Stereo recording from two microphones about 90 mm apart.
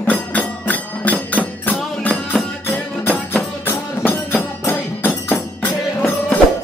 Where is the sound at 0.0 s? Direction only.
15° left (ahead or behind).